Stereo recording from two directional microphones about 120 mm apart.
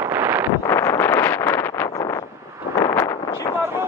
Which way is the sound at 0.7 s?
25° left (ahead or behind).